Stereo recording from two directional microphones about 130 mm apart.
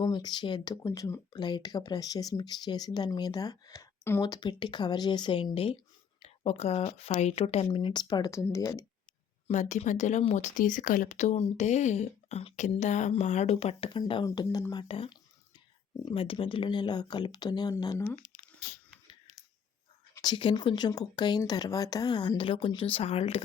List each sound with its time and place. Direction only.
0.0 s speech: 35° left (ahead or behind)
1.3 s speech: 35° left (ahead or behind)
4.3 s speech: 35° left (ahead or behind)
7.8 s speech: 35° left (ahead or behind)
9.5 s speech: 65° left (ahead or behind)
12.5 s speech: 65° left (ahead or behind)
13.9 s speech: 40° left (ahead or behind)
14.8 s speech: 45° left (ahead or behind); by 18.2 s 20° left (ahead or behind)
20.2 s speech: 40° left (ahead or behind)